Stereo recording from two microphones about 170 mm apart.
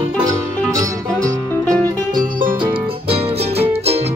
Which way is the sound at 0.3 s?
20° right (ahead or behind).